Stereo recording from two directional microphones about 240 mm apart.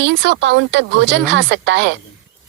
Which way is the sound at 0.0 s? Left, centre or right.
Right.